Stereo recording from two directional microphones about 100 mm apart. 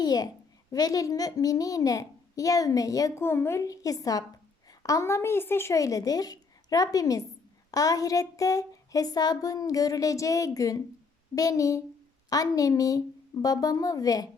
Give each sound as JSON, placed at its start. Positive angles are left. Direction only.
{"t": 0.0, "sound": "a woman's voice", "side_deg": 40}
{"t": 3.2, "sound": "speech", "side_deg": 25}